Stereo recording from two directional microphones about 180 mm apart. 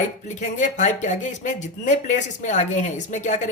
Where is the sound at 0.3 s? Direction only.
40° left (ahead or behind).